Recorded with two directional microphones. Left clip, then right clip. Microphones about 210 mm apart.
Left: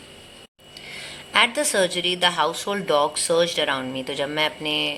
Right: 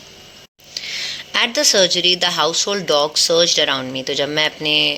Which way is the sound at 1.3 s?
30° right (ahead or behind).